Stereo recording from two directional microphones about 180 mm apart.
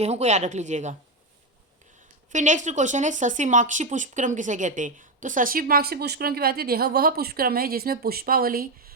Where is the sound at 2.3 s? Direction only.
45° right (ahead or behind).